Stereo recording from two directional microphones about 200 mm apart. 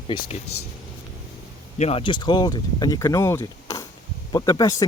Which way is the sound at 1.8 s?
30° left (ahead or behind).